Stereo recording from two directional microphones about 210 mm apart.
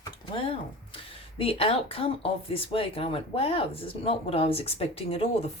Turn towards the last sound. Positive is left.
turn(degrees=30)  # may be behind; listen again after turning